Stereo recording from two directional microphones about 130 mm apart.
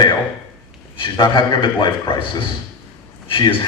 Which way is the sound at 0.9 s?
35° left (ahead or behind).